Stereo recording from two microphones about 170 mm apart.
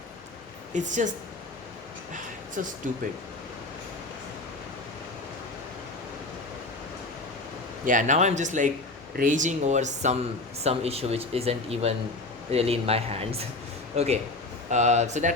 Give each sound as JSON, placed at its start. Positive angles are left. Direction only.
{"t": 0.7, "sound": "speech", "side_deg": -45}
{"t": 2.6, "sound": "speech", "side_deg": -50}
{"t": 7.9, "sound": "speech", "side_deg": -45}